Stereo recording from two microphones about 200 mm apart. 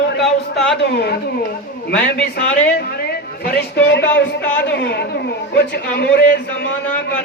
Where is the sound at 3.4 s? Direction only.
55° left (ahead or behind).